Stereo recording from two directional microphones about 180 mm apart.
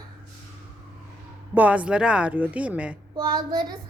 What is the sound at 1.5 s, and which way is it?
A woman's voice, 10° right (ahead or behind).